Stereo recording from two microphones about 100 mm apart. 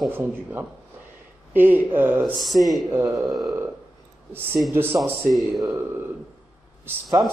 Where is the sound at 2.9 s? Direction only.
25° right (ahead or behind).